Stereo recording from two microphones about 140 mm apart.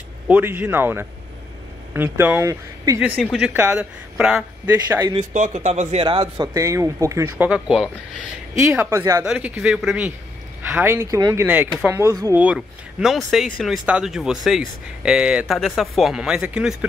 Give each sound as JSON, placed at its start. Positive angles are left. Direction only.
{"t": 0.3, "sound": "speech", "side_deg": -10}
{"t": 3.0, "sound": "speech", "side_deg": 0}
{"t": 5.3, "sound": "a man's voice", "side_deg": -60}
{"t": 6.0, "sound": "speech", "side_deg": -35}
{"t": 6.5, "sound": "speech", "side_deg": -20}
{"t": 8.7, "sound": "speech", "side_deg": -20}
{"t": 9.2, "sound": "speech", "side_deg": -5}
{"t": 10.7, "sound": "speech", "side_deg": -15}
{"t": 11.4, "sound": "speech", "side_deg": -10}
{"t": 12.3, "sound": "speech", "side_deg": -10}